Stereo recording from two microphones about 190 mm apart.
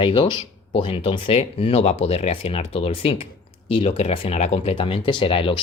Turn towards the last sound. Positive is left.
turn(degrees=30)  # may be behind; listen again after turning